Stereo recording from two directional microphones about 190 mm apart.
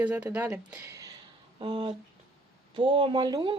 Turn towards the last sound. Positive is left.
turn(degrees=-20)  # may be behind; listen again after turning